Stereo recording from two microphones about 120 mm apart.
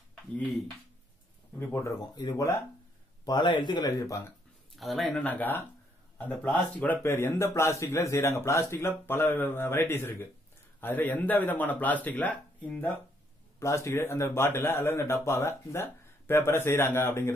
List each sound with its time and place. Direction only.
1.6 s a man's voice: 20° left (ahead or behind)
3.3 s a man's voice: 40° left (ahead or behind)
3.8 s a man's voice: 25° left (ahead or behind)
4.7 s speech: centre (ahead or behind)
5.2 s a man's voice: 15° left (ahead or behind)
7.0 s a man's voice: 20° left (ahead or behind)
13.6 s a man's voice: 25° left (ahead or behind)